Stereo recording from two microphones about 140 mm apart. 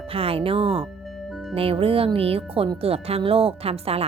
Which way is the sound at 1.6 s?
40° right (ahead or behind).